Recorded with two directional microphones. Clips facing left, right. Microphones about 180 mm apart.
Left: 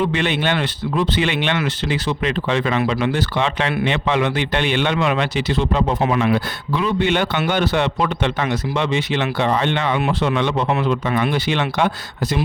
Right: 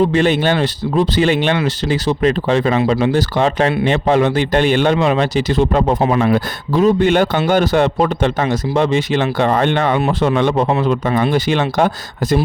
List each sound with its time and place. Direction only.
0.0 s a man's voice: 40° right (ahead or behind)